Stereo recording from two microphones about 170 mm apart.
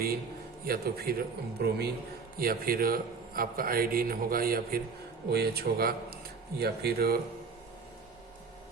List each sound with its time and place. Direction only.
0.6 s a man's voice: 65° right (ahead or behind)
2.4 s a man's voice: 60° right (ahead or behind)